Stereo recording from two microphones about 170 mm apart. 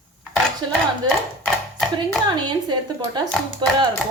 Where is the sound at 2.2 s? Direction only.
25° right (ahead or behind).